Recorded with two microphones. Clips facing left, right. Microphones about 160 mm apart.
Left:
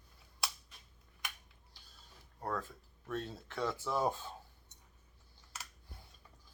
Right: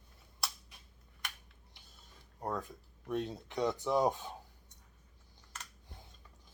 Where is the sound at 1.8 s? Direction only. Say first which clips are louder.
Right 2 dB; 20° right (ahead or behind).